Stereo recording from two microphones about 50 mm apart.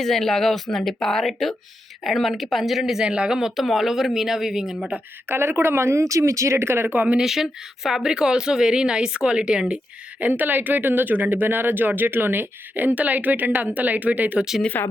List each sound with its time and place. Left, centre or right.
0.0 s speech: centre
3.1 s speech: right
3.3 s speech: centre
5.3 s speech: right
6.6 s speech: right
6.8 s speech: right
7.2 s speech: centre
10.2 s speech: right
14.8 s speech: left